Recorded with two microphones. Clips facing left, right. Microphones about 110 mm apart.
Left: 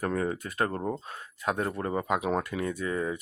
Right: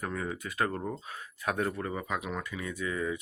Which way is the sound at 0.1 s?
45° left (ahead or behind).